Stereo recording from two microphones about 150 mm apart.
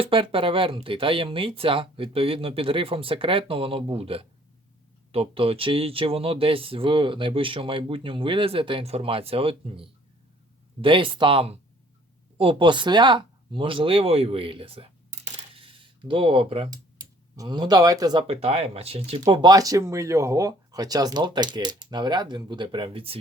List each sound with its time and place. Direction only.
0.0 s speech: 35° right (ahead or behind)
15.5 s a sound: 35° right (ahead or behind)
16.6 s speech: 25° right (ahead or behind); by 19.2 s 40° right (ahead or behind)
19.2 s speech: 25° right (ahead or behind)